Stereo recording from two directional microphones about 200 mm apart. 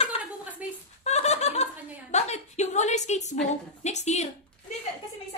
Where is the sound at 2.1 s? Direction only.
35° left (ahead or behind).